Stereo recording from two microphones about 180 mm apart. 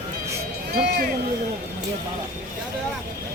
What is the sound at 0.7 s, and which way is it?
Run, 60° right (ahead or behind).